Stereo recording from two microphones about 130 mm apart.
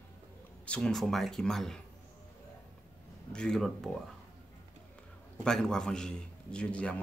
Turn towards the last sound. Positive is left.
turn(degrees=10)  # may be behind; listen again after turning